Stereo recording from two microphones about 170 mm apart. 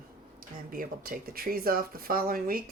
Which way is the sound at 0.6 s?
55° right (ahead or behind).